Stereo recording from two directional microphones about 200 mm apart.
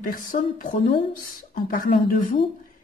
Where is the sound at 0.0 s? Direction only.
40° left (ahead or behind).